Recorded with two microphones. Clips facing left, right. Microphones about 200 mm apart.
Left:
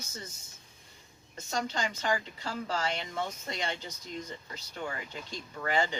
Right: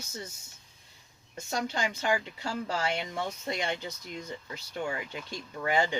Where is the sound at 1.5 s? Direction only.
10° right (ahead or behind).